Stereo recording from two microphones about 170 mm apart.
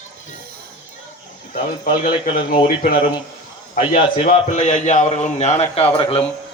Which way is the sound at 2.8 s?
35° left (ahead or behind).